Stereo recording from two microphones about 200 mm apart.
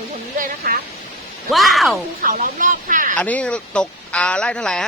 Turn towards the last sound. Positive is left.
turn(degrees=5)  # may be behind; listen again after turning